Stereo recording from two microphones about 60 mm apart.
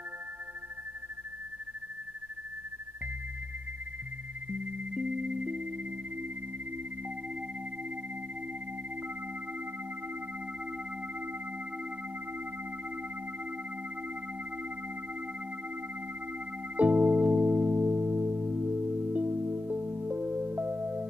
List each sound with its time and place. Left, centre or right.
4.9 s music: centre
16.7 s music: right